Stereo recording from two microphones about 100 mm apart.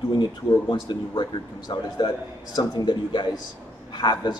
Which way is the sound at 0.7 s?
45° left (ahead or behind).